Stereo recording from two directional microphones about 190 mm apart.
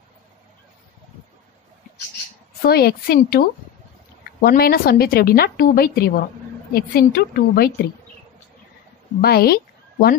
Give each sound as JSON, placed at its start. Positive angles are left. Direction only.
{"t": 2.6, "sound": "a woman's voice", "side_deg": 55}
{"t": 9.2, "sound": "speech", "side_deg": 55}